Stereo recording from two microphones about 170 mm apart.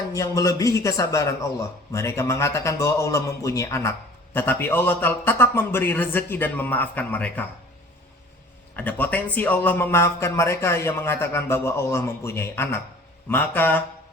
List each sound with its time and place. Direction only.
0.1 s speech: 20° left (ahead or behind)
8.7 s speech: 10° left (ahead or behind)